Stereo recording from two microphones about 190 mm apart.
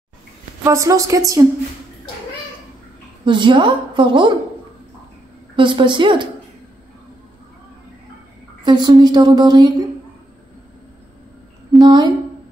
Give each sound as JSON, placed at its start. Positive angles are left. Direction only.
{"t": 0.7, "sound": "a woman's voice", "side_deg": -15}
{"t": 3.3, "sound": "a woman's voice", "side_deg": -25}
{"t": 5.6, "sound": "a woman's voice", "side_deg": -25}
{"t": 8.6, "sound": "a woman's voice", "side_deg": -25}
{"t": 11.8, "sound": "a woman's voice", "side_deg": -20}